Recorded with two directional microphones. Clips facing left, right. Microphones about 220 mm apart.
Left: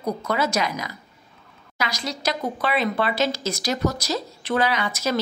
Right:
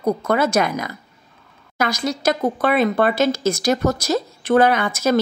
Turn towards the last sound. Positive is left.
turn(degrees=-50)  # may be behind; listen again after turning